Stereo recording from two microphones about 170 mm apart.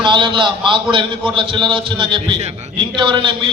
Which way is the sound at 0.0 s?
30° right (ahead or behind).